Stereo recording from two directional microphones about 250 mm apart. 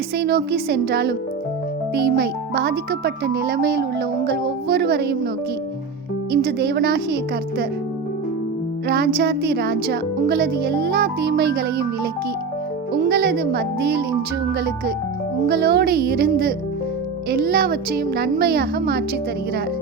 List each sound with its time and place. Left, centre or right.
0.2 s speech: right
6.3 s speech: right
8.9 s speech: right
13.0 s speech: right